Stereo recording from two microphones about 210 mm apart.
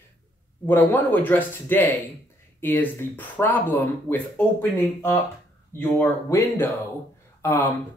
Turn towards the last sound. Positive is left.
turn(degrees=10)  # may be behind; listen again after turning